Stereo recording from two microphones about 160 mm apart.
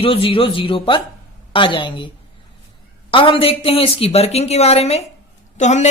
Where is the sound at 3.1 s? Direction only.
35° left (ahead or behind).